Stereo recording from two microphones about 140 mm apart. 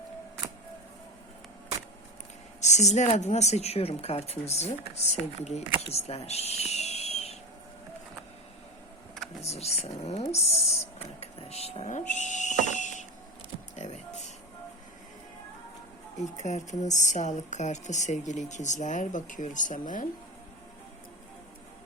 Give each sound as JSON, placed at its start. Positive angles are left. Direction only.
{"t": 2.6, "sound": "speech", "side_deg": 55}
{"t": 5.9, "sound": "a sound", "side_deg": 50}
{"t": 9.4, "sound": "speech", "side_deg": 50}
{"t": 11.2, "sound": "power windows", "side_deg": 50}
{"t": 12.6, "sound": "a sound", "side_deg": 60}
{"t": 13.7, "sound": "music", "side_deg": 55}
{"t": 16.4, "sound": "a woman's voice", "side_deg": 55}